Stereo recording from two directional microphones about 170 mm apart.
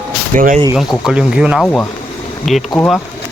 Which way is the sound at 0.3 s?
55° right (ahead or behind).